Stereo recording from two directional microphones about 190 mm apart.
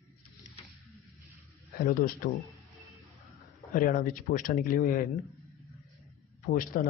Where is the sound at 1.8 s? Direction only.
50° left (ahead or behind).